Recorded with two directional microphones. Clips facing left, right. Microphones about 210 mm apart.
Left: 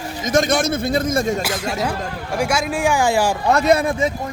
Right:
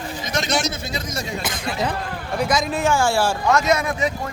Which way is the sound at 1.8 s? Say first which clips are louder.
Left 1 dB; 10° left (ahead or behind).